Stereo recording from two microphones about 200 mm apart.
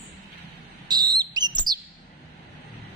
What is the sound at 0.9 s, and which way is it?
Bird, 20° right (ahead or behind).